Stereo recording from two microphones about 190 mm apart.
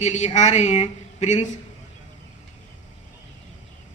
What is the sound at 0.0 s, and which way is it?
Speech, 35° left (ahead or behind).